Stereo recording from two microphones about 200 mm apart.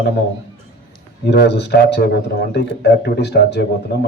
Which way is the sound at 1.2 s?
55° left (ahead or behind).